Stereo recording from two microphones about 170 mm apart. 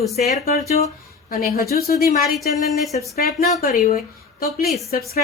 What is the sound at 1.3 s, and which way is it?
Speech, 60° left (ahead or behind).